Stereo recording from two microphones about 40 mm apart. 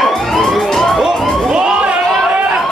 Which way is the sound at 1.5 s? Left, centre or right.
Centre.